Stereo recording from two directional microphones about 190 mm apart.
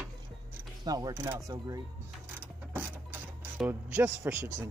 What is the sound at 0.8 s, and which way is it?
Speech, 20° right (ahead or behind).